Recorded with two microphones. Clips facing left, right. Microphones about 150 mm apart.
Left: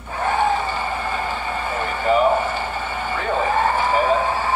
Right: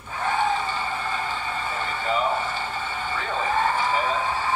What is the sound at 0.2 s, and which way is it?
Vehicle, 45° left (ahead or behind).